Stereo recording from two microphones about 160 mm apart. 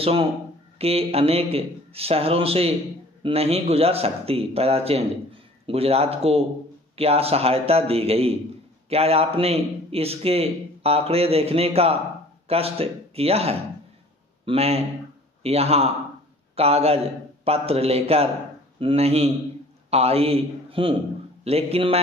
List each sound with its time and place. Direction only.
0.0 s a man's voice: 35° right (ahead or behind)